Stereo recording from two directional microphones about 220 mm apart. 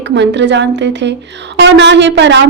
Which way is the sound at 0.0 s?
50° right (ahead or behind).